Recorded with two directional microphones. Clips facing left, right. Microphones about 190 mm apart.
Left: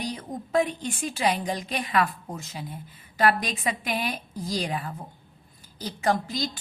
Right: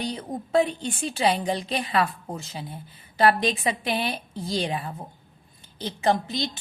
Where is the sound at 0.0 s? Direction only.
30° right (ahead or behind).